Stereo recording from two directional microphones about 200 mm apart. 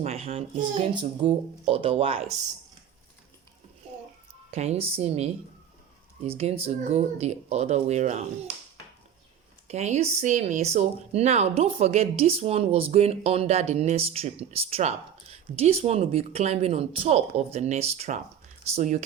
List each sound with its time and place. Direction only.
0.0 s speech: 30° right (ahead or behind)
4.5 s speech: 30° right (ahead or behind)
9.6 s speech: 35° right (ahead or behind)